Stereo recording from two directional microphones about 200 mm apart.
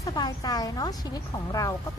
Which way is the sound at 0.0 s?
20° left (ahead or behind).